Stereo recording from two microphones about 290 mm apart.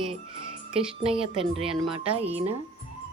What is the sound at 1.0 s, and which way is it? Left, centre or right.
Speech, centre.